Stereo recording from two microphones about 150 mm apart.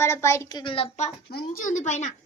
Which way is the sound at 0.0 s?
20° left (ahead or behind).